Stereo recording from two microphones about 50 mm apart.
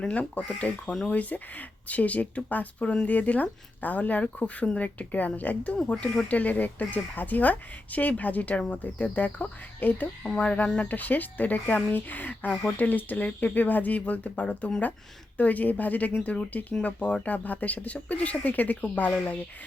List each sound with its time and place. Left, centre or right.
0.0 s speech: left
5.7 s speech: centre
6.2 s speech: left
10.2 s speech: centre
10.8 s speech: left